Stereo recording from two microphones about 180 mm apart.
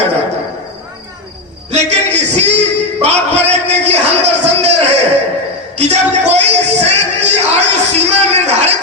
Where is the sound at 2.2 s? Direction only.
40° right (ahead or behind).